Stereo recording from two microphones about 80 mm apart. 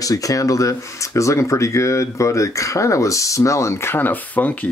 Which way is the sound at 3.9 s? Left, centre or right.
Left.